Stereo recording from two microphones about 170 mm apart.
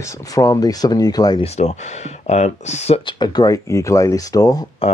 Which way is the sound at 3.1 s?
25° left (ahead or behind).